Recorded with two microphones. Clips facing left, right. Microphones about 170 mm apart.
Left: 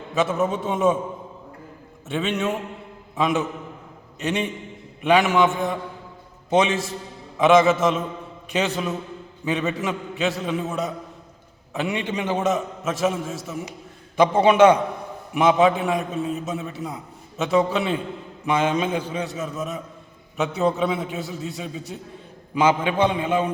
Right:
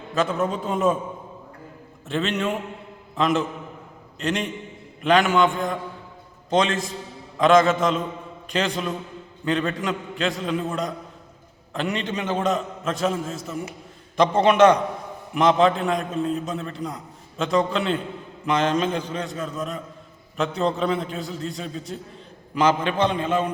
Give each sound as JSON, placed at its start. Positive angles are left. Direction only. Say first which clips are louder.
{"t": 0.1, "sound": "a man's voice", "louder": "left 1 dB", "side_deg": 5}
{"t": 2.0, "sound": "a man's voice", "louder": "even", "side_deg": 0}